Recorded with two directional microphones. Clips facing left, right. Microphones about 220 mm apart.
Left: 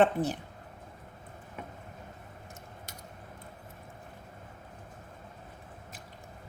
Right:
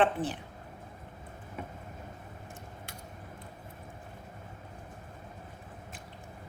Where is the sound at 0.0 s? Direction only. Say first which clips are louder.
Left 3 dB; 40° left (ahead or behind).